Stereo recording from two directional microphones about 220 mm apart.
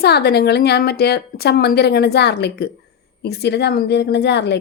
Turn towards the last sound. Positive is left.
turn(degrees=50)  # may be behind; listen again after turning